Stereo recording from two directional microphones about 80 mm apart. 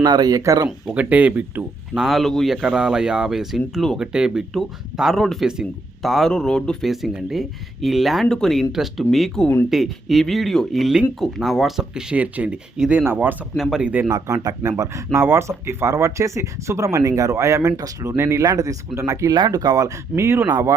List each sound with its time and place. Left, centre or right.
0.0 s speech: right
0.9 s speech: centre
1.9 s speech: centre
14.1 s speech: right
18.2 s speech: right
20.5 s speech: right